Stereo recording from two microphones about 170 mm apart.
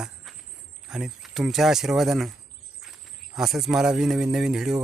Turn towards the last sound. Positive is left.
turn(degrees=-5)  # may be behind; listen again after turning